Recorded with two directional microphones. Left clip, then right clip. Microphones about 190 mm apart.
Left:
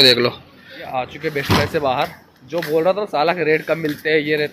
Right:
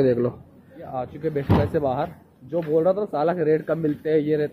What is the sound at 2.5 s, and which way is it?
Speech, 5° left (ahead or behind).